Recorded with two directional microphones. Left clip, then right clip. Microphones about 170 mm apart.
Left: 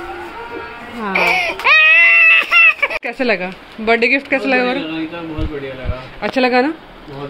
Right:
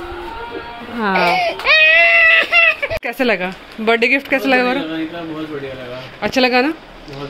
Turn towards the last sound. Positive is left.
turn(degrees=-10)  # may be behind; listen again after turning